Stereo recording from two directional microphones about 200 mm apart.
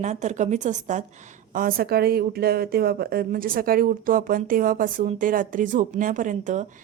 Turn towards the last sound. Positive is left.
turn(degrees=-40)  # may be behind; listen again after turning